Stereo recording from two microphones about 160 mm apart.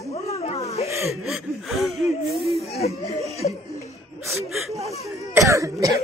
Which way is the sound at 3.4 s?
50° left (ahead or behind).